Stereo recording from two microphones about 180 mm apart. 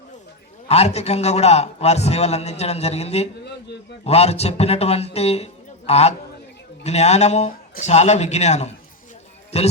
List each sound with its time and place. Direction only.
0.7 s a man's voice: 35° left (ahead or behind)